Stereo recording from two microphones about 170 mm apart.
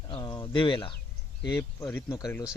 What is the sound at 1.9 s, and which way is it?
Speech, 10° left (ahead or behind).